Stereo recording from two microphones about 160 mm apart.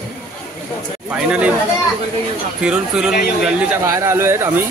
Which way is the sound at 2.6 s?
5° right (ahead or behind).